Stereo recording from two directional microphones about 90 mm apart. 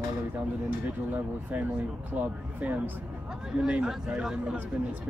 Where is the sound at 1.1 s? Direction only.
20° right (ahead or behind).